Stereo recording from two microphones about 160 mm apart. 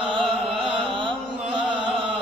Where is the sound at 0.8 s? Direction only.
30° right (ahead or behind).